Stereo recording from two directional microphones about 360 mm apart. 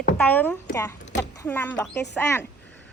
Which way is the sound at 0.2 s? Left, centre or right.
Centre.